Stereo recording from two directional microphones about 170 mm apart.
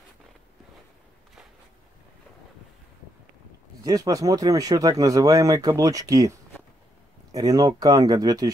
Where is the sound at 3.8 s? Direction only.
20° right (ahead or behind).